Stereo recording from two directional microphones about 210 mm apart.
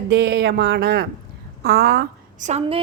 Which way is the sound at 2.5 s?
25° right (ahead or behind).